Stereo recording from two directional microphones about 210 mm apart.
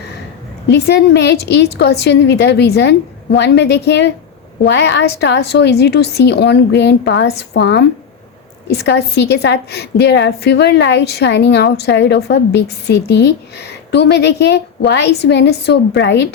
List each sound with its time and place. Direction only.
0.7 s a woman's voice: 55° left (ahead or behind)